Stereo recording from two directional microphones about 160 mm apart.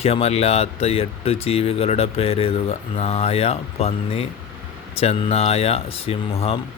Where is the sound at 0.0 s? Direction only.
40° left (ahead or behind).